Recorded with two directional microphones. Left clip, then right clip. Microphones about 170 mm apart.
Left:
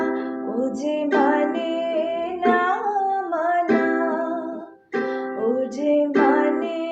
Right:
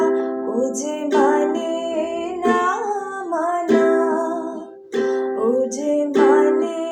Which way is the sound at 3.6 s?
50° right (ahead or behind).